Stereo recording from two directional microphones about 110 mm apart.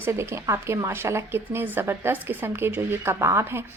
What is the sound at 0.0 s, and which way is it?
A woman's voice, 25° right (ahead or behind).